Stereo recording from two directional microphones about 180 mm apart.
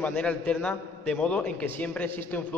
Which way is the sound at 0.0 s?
5° left (ahead or behind).